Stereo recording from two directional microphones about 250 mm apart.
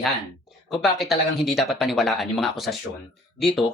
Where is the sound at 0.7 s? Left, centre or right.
Centre.